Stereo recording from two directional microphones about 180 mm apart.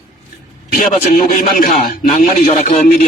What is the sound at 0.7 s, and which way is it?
A man's voice, 50° left (ahead or behind).